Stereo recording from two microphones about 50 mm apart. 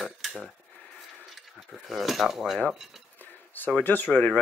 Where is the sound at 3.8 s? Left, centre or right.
Left.